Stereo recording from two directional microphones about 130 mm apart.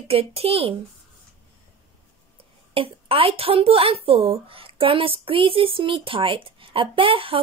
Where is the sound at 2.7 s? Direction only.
45° right (ahead or behind).